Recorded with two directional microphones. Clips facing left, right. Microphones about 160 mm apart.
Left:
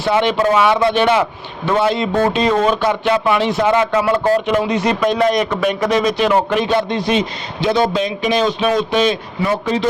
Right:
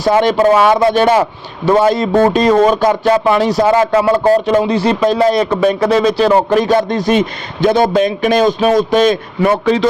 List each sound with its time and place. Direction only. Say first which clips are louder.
0.0 s speech: right 5 dB; 40° right (ahead or behind); by 9.8 s 70° right (ahead or behind)